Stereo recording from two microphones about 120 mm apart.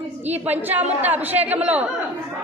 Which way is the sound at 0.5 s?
15° right (ahead or behind).